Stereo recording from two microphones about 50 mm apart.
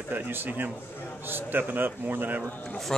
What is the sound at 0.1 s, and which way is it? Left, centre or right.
A man's voice, right.